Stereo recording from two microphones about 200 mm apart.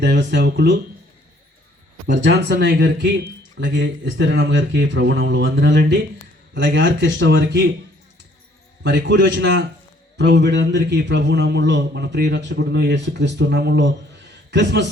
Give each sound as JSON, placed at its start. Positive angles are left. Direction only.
{"t": 0.0, "sound": "a man's voice", "side_deg": -60}
{"t": 2.2, "sound": "a man's voice", "side_deg": -60}
{"t": 8.8, "sound": "a man's voice", "side_deg": -60}